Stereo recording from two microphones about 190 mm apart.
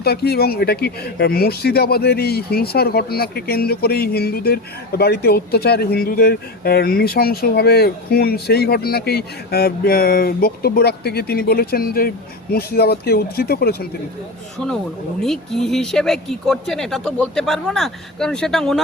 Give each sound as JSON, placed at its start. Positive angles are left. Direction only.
{"t": 0.0, "sound": "speech", "side_deg": 55}
{"t": 15.2, "sound": "speech", "side_deg": 0}